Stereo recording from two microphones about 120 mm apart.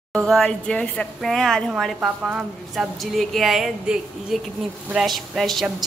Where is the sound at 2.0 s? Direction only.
5° right (ahead or behind).